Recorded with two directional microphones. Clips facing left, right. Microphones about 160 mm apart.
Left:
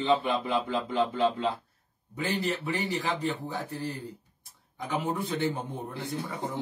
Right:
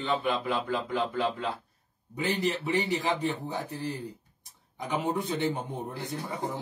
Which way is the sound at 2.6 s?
20° right (ahead or behind).